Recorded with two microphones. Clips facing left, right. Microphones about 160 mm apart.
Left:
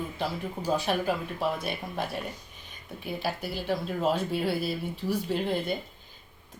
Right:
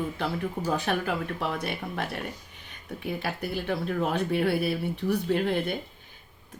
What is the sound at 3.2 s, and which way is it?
Speech, 55° right (ahead or behind).